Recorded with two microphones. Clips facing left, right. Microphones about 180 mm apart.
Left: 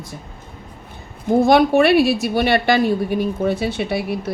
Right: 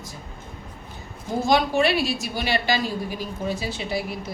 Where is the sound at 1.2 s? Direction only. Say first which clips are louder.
Left 8 dB; 60° left (ahead or behind).